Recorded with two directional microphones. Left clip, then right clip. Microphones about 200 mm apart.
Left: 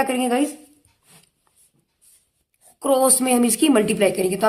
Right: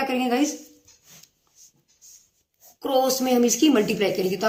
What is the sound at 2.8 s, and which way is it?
A woman's voice, 40° left (ahead or behind).